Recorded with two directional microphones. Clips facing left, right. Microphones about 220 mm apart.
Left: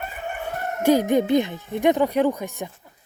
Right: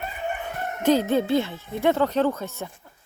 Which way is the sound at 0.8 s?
10° left (ahead or behind).